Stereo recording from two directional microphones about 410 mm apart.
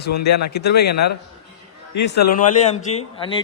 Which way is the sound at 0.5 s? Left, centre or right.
Left.